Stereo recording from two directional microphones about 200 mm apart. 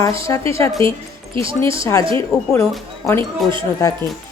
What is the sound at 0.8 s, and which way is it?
Speech, 25° right (ahead or behind).